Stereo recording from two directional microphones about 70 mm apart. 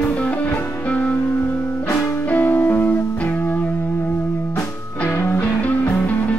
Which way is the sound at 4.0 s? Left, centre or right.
Left.